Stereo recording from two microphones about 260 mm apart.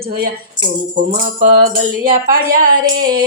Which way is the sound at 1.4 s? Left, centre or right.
Right.